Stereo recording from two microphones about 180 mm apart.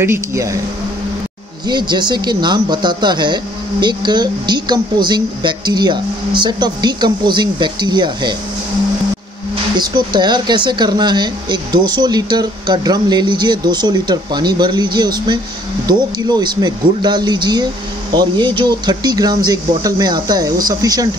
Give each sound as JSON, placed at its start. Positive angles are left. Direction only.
{"t": 0.0, "sound": "speech", "side_deg": -15}
{"t": 1.7, "sound": "speech", "side_deg": -25}
{"t": 9.8, "sound": "speech", "side_deg": -25}